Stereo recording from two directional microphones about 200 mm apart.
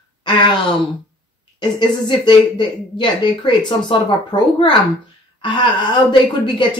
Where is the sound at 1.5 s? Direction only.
20° left (ahead or behind).